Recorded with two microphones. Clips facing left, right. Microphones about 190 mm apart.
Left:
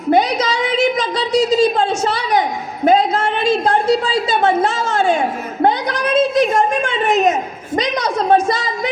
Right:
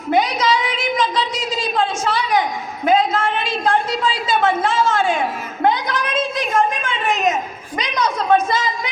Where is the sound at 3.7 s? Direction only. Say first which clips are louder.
Left 4 dB; 40° left (ahead or behind).